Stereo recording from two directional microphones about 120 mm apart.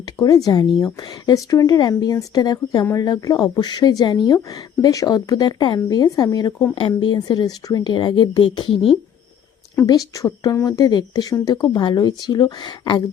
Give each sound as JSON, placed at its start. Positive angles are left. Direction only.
{"t": 0.2, "sound": "speech", "side_deg": 30}
{"t": 9.8, "sound": "speech", "side_deg": 30}